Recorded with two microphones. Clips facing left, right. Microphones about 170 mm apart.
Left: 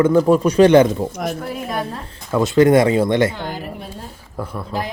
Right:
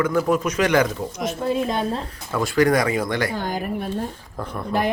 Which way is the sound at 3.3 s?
45° right (ahead or behind).